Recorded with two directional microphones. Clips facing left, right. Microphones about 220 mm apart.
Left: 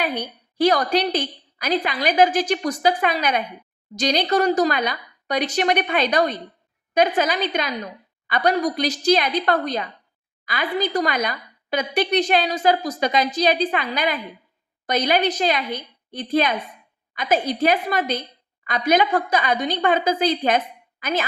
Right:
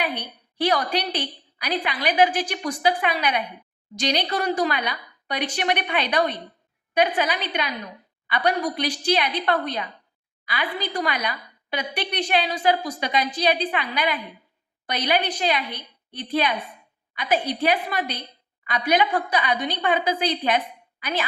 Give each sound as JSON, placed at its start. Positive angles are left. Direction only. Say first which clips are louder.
{"t": 0.0, "sound": "a woman's voice", "louder": "left 3 dB", "side_deg": 45}